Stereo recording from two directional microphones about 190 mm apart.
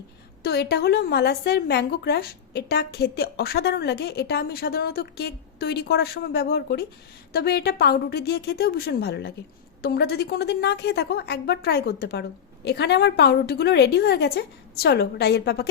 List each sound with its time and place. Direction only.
0.4 s a woman's voice: 60° left (ahead or behind)